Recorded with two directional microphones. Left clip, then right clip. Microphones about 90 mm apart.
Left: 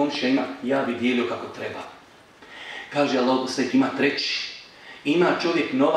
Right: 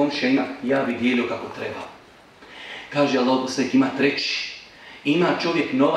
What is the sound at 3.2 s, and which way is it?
Speech, 20° left (ahead or behind).